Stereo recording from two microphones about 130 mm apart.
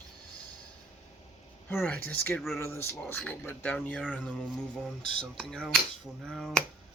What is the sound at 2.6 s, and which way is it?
Speech, 20° left (ahead or behind).